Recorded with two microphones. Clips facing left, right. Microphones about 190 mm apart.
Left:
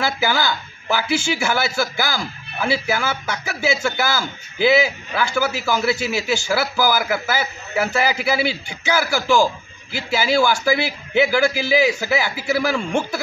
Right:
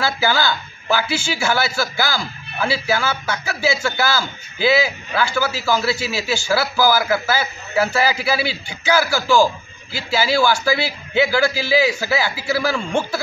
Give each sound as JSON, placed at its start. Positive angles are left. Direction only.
{"t": 0.0, "sound": "a man's voice", "side_deg": 20}